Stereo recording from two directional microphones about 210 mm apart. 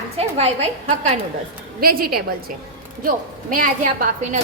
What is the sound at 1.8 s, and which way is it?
Speech, 45° right (ahead or behind).